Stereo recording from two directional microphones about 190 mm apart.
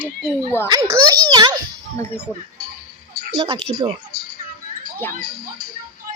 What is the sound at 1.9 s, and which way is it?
Speech, 10° left (ahead or behind).